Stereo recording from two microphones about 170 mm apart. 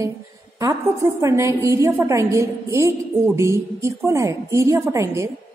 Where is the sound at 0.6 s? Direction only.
20° right (ahead or behind).